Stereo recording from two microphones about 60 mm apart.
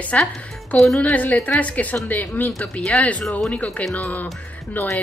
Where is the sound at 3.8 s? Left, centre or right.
Centre.